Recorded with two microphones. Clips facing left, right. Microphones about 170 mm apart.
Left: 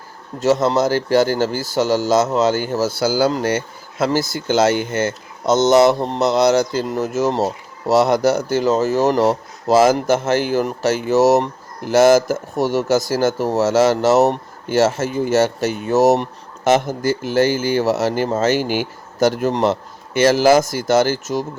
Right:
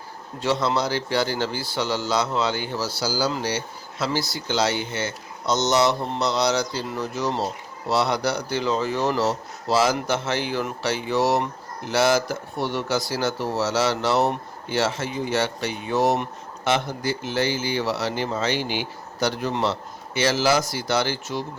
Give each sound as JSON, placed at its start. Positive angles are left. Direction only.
{"t": 0.3, "sound": "speech", "side_deg": 45}